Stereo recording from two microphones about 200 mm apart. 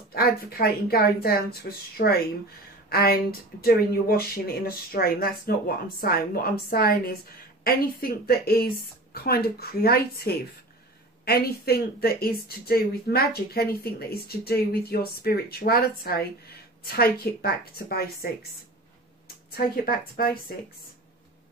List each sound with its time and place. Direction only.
0.1 s speech: 50° left (ahead or behind)
19.2 s speech: 50° left (ahead or behind)